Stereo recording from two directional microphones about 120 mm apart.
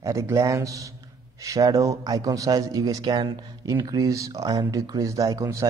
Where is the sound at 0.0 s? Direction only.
25° right (ahead or behind).